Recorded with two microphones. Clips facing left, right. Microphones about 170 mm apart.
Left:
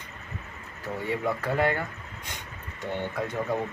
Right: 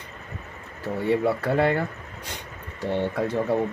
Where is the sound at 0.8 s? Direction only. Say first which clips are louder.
Right 6 dB; 30° right (ahead or behind).